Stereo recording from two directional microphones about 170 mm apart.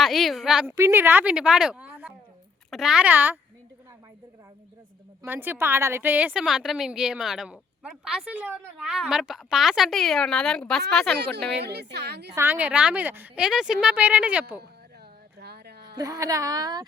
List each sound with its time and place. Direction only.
0.0 s a woman's voice: centre (ahead or behind)
0.7 s a woman's voice: 15° right (ahead or behind)
5.2 s a woman's voice: 10° right (ahead or behind)
11.6 s speech: 75° right (ahead or behind)
12.3 s a woman's voice: 15° right (ahead or behind)
15.4 s a sound: 70° right (ahead or behind)
16.0 s a woman's voice: 20° right (ahead or behind)